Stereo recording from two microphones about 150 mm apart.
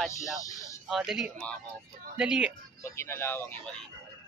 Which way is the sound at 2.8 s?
20° left (ahead or behind).